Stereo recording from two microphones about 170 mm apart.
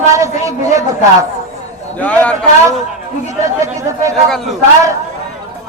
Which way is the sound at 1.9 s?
10° left (ahead or behind).